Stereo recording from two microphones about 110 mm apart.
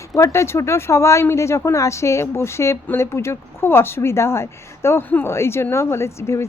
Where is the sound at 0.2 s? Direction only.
25° left (ahead or behind).